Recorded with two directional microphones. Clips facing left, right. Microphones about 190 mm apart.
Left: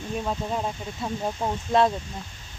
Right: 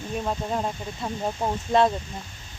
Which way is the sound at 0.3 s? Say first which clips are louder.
Right 2 dB; centre (ahead or behind).